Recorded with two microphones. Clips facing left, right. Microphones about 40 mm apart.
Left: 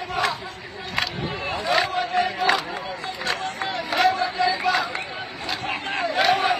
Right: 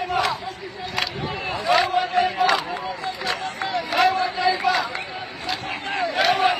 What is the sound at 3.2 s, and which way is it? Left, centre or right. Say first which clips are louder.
Run: left 1 dB; left.